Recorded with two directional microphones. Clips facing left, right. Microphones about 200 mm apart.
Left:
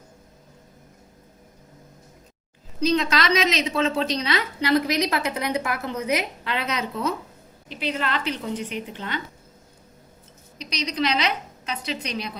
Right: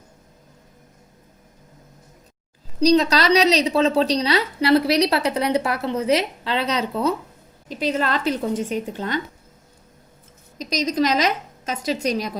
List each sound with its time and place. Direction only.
2.8 s a woman's voice: 40° right (ahead or behind)
10.6 s a woman's voice: 45° right (ahead or behind)